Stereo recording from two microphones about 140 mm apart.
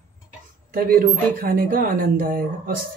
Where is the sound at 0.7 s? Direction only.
90° right.